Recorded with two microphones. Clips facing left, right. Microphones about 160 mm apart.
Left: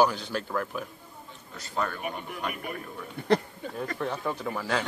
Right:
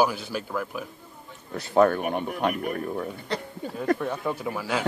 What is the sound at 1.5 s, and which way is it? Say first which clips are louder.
Speech: right 12 dB; 60° right (ahead or behind).